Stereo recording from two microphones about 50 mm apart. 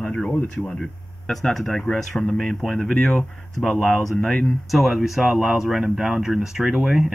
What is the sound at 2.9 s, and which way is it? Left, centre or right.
Speech, left.